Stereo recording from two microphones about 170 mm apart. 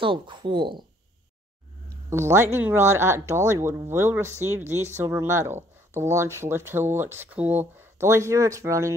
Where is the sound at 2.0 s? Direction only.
15° right (ahead or behind).